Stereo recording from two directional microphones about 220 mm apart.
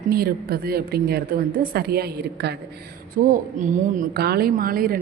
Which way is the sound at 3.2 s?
35° right (ahead or behind).